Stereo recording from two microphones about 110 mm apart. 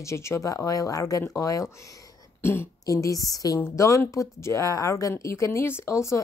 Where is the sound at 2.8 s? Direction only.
30° left (ahead or behind).